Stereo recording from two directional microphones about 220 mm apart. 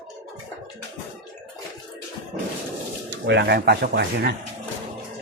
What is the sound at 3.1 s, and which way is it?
Speech, 55° right (ahead or behind).